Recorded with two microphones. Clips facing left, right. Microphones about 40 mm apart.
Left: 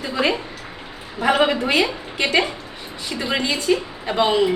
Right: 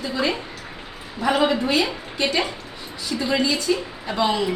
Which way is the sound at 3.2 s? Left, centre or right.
Left.